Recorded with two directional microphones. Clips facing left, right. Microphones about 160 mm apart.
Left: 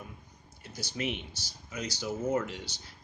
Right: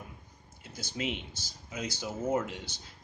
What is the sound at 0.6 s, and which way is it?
Speech, 20° right (ahead or behind).